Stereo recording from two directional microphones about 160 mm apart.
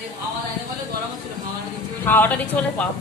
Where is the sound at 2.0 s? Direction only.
10° left (ahead or behind).